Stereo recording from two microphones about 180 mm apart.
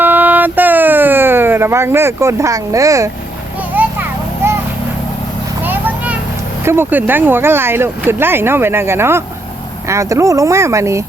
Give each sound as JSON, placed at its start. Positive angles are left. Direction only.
{"t": 0.0, "sound": "a sound", "side_deg": -10}
{"t": 3.8, "sound": "children playing", "side_deg": -10}
{"t": 5.6, "sound": "children playing", "side_deg": -10}
{"t": 6.7, "sound": "speech", "side_deg": -10}